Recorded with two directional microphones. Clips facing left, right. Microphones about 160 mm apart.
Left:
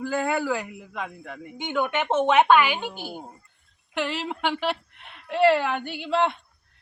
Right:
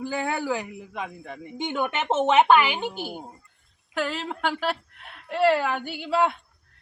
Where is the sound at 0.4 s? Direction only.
15° right (ahead or behind).